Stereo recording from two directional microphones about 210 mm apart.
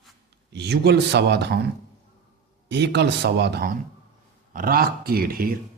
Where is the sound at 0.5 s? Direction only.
50° right (ahead or behind).